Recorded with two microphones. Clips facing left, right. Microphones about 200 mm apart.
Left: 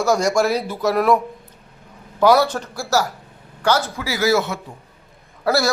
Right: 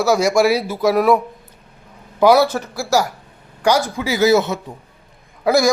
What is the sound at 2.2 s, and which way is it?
A man's voice, 10° right (ahead or behind).